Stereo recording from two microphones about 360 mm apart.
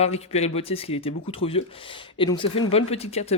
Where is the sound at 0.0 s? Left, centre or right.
Centre.